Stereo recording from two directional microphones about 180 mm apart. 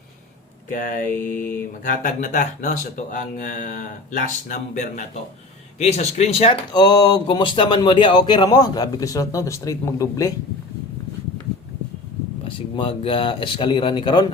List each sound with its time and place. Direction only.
0.7 s speech: 50° left (ahead or behind)
1.1 s mantra: 10° left (ahead or behind)
1.9 s speech: 45° left (ahead or behind); by 10.3 s 15° left (ahead or behind)
12.7 s speech: 30° left (ahead or behind)